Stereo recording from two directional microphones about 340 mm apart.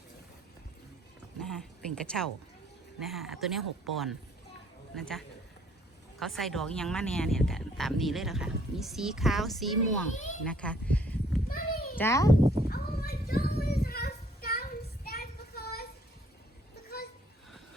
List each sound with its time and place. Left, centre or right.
1.4 s a sound: centre
3.0 s speech: centre
10.1 s a child's voice: left
10.4 s speech: centre
11.4 s children playing: left
11.9 s a child's voice: centre
12.4 s cat: centre
12.7 s child singing: left